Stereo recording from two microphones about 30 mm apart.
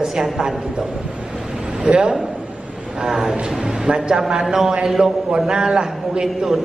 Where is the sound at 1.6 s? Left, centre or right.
Right.